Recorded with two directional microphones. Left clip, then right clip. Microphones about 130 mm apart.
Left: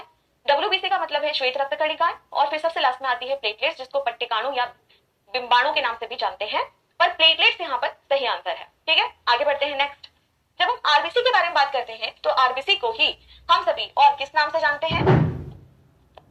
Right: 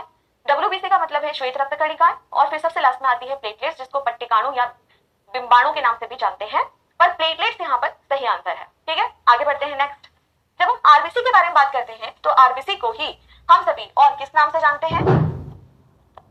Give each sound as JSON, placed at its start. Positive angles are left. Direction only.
{"t": 0.4, "sound": "a woman's voice", "side_deg": 30}